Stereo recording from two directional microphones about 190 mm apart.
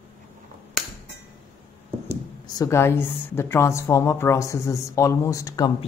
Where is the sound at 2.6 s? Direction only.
15° left (ahead or behind).